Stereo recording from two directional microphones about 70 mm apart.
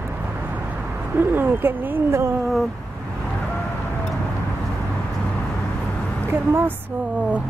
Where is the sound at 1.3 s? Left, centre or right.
Right.